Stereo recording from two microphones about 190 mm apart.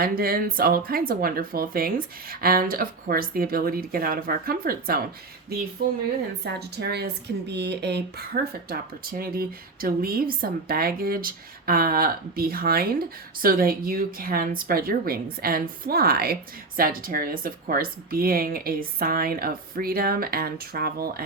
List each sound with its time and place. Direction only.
0.0 s a woman's voice: 50° right (ahead or behind)
6.4 s speech: 60° right (ahead or behind)
8.7 s a woman's voice: 50° right (ahead or behind)